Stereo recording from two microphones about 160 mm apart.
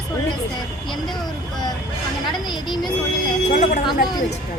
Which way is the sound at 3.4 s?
55° left (ahead or behind).